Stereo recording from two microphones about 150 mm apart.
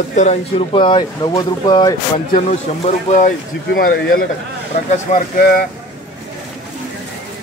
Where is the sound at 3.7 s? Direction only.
75° left (ahead or behind).